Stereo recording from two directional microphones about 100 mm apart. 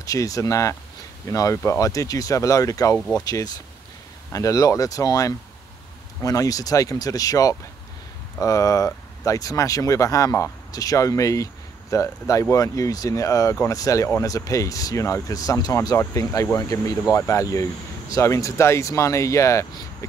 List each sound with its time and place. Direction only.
0.0 s speech: 35° left (ahead or behind)